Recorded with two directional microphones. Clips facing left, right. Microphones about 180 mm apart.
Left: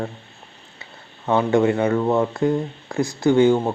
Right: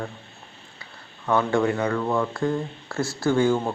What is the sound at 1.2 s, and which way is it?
Speech, 20° left (ahead or behind).